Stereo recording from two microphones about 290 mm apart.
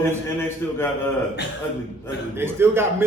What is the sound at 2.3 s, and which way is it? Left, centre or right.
Speech, centre.